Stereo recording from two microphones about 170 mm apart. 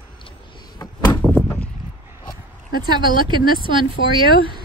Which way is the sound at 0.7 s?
25° left (ahead or behind).